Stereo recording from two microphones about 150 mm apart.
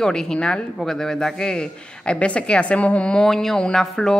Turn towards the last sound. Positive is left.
turn(degrees=5)  # may be behind; listen again after turning